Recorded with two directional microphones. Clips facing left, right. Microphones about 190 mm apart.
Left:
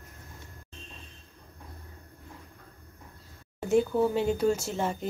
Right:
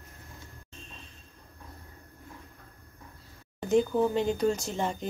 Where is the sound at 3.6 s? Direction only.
5° left (ahead or behind).